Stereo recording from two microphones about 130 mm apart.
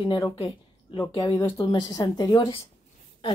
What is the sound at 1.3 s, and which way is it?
Speech, 20° left (ahead or behind).